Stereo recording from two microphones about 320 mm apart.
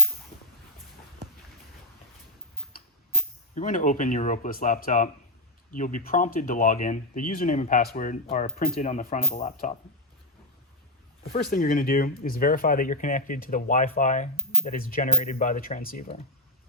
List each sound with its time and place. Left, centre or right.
3.5 s speech: left
11.3 s speech: left